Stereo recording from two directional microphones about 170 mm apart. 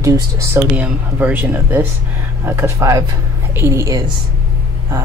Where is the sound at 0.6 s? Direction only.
10° right (ahead or behind).